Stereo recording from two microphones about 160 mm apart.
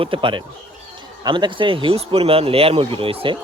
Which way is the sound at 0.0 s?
30° right (ahead or behind).